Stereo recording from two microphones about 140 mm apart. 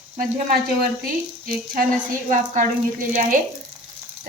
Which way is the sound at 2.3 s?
70° right (ahead or behind).